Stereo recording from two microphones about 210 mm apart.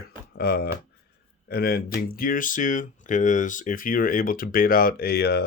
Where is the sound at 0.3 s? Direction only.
50° left (ahead or behind).